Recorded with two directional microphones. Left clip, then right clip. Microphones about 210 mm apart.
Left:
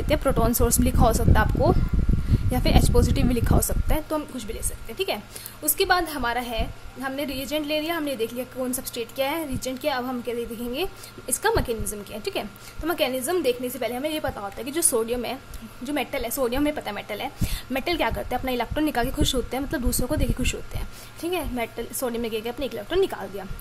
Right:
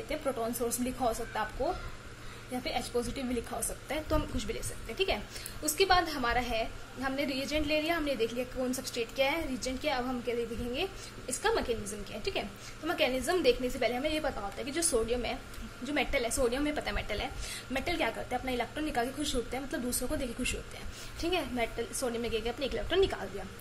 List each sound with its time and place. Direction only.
0.1 s a woman's voice: 40° left (ahead or behind); by 23.2 s 20° left (ahead or behind)